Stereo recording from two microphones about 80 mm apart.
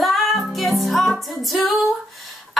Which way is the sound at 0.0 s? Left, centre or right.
Centre.